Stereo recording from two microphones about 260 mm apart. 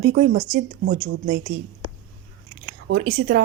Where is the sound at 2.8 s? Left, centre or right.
Right.